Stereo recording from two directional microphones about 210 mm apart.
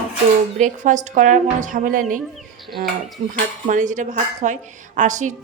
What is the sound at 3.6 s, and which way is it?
A woman's voice, 35° right (ahead or behind).